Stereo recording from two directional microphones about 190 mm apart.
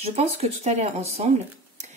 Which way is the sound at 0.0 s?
35° right (ahead or behind).